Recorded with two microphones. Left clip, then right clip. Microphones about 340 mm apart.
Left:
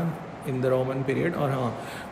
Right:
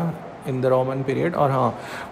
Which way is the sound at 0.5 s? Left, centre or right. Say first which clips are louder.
Right 5 dB; centre.